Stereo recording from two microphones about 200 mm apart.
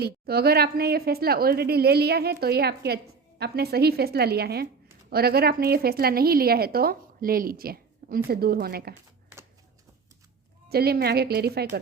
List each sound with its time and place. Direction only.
0.0 s a woman's voice: 50° right (ahead or behind)
10.7 s a woman's voice: 50° right (ahead or behind)